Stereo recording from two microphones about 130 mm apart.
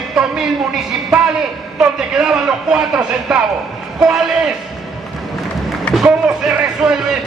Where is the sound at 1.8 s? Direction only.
5° right (ahead or behind).